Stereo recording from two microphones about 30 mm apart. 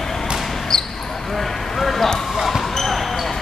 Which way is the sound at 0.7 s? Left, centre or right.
Centre.